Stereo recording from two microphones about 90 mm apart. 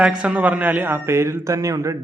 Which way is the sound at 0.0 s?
10° right (ahead or behind).